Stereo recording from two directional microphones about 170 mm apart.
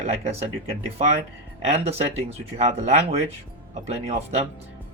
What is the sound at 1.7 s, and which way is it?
Speech, 40° right (ahead or behind).